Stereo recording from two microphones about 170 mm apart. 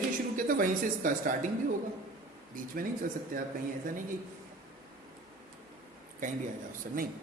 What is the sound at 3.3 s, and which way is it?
Speech, 55° right (ahead or behind).